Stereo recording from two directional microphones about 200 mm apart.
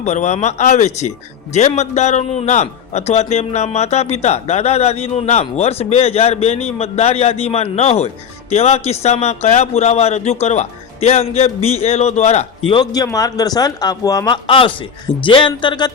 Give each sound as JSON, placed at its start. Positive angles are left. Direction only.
{"t": 0.0, "sound": "a man's voice", "side_deg": 35}